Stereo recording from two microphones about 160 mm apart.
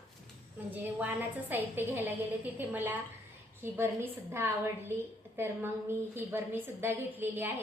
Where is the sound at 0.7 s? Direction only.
10° right (ahead or behind).